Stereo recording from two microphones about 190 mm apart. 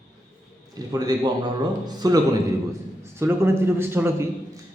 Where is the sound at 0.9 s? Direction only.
20° right (ahead or behind).